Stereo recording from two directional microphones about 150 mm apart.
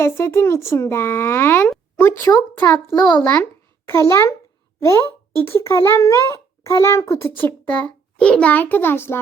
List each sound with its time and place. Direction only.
0.0 s a child's voice: 20° left (ahead or behind)
3.8 s a child's voice: 15° left (ahead or behind)